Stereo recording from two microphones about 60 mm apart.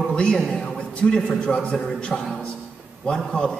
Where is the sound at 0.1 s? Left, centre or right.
Centre.